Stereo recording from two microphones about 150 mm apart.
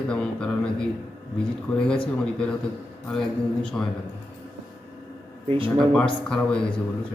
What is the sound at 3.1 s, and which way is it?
Speech, 5° left (ahead or behind).